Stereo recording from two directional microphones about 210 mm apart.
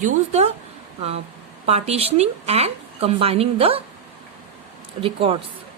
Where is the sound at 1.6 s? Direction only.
30° right (ahead or behind).